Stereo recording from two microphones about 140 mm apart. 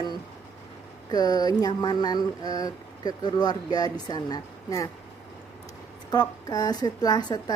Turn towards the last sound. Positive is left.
turn(degrees=30)  # may be behind; listen again after turning